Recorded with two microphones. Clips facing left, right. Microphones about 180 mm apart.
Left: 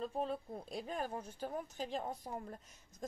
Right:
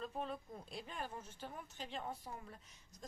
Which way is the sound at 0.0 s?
35° left (ahead or behind).